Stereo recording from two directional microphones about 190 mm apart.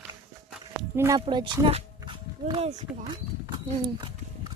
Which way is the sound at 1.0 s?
15° right (ahead or behind).